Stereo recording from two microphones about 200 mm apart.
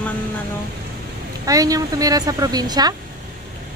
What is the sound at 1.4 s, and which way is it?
A woman's voice, 15° right (ahead or behind).